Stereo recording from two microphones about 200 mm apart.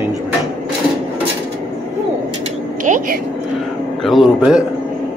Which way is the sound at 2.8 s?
40° right (ahead or behind).